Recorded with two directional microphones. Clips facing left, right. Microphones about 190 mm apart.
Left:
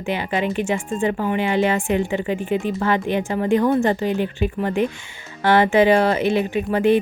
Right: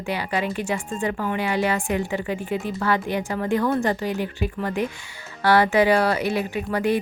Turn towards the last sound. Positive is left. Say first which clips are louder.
# left 5 dB
turn(degrees=25)  # may be behind; listen again after turning